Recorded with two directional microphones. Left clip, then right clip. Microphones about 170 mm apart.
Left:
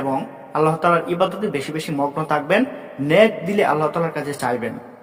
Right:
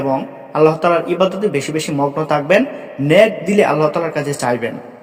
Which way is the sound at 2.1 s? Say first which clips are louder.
Right 6 dB; 30° right (ahead or behind).